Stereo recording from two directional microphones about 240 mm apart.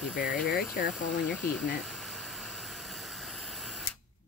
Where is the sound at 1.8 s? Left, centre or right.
Centre.